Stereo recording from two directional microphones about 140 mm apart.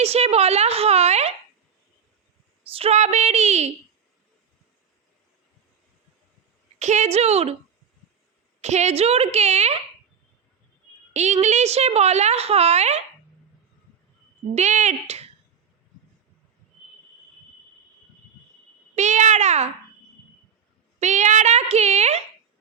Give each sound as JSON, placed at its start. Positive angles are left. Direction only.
{"t": 0.0, "sound": "a woman's voice", "side_deg": -45}
{"t": 2.7, "sound": "a woman's voice", "side_deg": -50}
{"t": 6.7, "sound": "a woman's voice", "side_deg": -55}
{"t": 8.6, "sound": "a woman's voice", "side_deg": -55}
{"t": 11.1, "sound": "a woman's voice", "side_deg": -55}
{"t": 14.5, "sound": "speech", "side_deg": -55}
{"t": 18.9, "sound": "a woman's voice", "side_deg": -55}
{"t": 21.0, "sound": "a woman's voice", "side_deg": -55}